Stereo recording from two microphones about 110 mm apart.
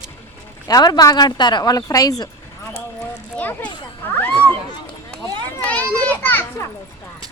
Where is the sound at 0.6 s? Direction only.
35° left (ahead or behind).